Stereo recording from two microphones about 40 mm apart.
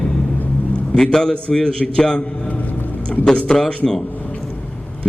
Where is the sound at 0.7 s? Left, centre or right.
Left.